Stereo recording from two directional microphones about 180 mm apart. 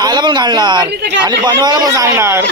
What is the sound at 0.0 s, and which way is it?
Speech, 25° right (ahead or behind).